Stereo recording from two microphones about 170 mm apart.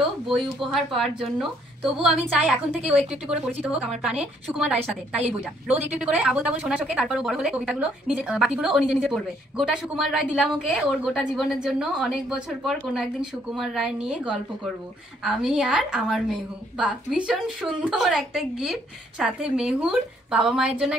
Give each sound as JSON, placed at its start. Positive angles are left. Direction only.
{"t": 0.3, "sound": "a woman's voice", "side_deg": 0}
{"t": 5.9, "sound": "a woman's voice", "side_deg": -5}